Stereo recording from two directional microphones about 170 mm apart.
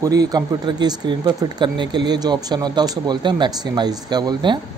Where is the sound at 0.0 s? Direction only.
20° right (ahead or behind).